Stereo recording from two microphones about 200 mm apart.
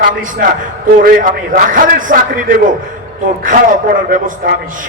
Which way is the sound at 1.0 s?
45° right (ahead or behind).